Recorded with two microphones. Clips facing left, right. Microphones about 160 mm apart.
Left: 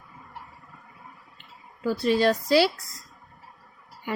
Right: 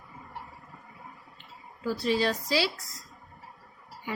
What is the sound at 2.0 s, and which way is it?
Speech, 55° left (ahead or behind).